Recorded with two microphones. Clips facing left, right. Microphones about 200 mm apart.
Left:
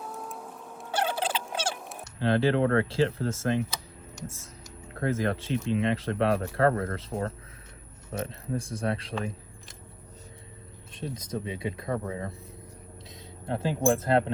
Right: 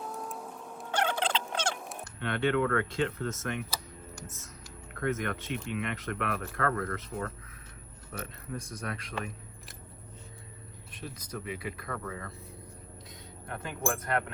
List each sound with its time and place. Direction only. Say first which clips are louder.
0.0 s a sound: even; centre (ahead or behind)
2.1 s speech: left 5 dB; 30° left (ahead or behind)
5.0 s speech: left 4 dB; 30° left (ahead or behind)
10.9 s speech: left 7 dB; 25° left (ahead or behind)
13.4 s speech: left 9 dB; 30° left (ahead or behind)